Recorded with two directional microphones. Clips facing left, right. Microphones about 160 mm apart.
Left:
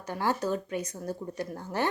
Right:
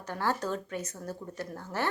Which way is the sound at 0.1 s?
15° left (ahead or behind).